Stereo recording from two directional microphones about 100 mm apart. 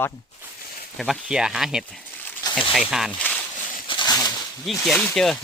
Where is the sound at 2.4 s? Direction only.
40° left (ahead or behind).